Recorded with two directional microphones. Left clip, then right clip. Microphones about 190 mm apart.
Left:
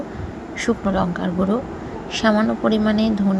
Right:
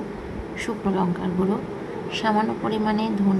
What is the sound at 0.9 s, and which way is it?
A woman's voice, 15° left (ahead or behind).